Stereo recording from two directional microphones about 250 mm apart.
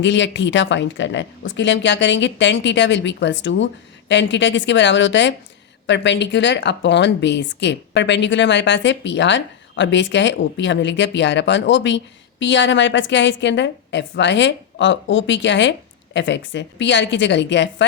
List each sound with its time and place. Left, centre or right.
0.0 s speech: left